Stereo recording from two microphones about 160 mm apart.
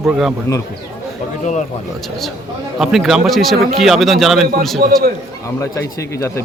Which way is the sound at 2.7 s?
Centre (ahead or behind).